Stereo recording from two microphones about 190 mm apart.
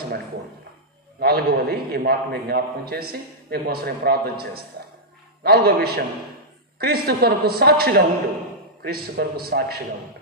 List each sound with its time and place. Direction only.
1.2 s a man's voice: 55° right (ahead or behind)